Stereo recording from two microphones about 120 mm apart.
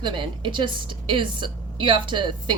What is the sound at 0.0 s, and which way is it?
A woman's voice, 40° right (ahead or behind).